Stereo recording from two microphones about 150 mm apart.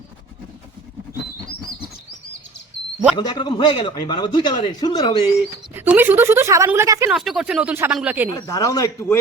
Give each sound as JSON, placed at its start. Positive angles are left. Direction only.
{"t": 3.2, "sound": "a man's voice", "side_deg": 30}
{"t": 5.7, "sound": "a woman's voice", "side_deg": -15}
{"t": 7.1, "sound": "a woman's voice", "side_deg": 0}
{"t": 8.4, "sound": "a man's voice", "side_deg": 25}